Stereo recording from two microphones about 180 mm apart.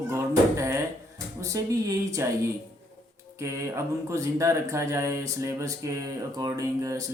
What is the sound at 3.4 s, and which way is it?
Speech, 15° right (ahead or behind).